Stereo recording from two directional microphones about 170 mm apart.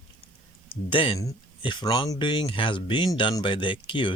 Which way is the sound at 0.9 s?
30° left (ahead or behind).